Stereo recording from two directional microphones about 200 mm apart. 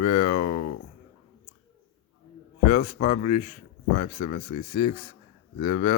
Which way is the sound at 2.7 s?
35° left (ahead or behind).